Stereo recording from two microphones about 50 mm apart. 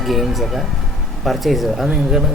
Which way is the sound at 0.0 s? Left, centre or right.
Centre.